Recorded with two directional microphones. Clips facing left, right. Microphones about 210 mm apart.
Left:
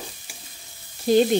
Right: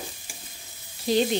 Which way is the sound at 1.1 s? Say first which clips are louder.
Left 5 dB; 50° left (ahead or behind).